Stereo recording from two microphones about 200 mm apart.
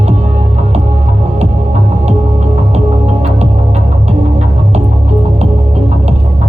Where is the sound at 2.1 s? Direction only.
35° right (ahead or behind).